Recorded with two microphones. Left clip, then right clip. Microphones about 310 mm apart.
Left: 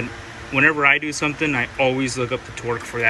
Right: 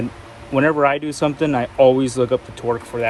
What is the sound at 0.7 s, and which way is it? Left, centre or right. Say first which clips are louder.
Speech: even; centre.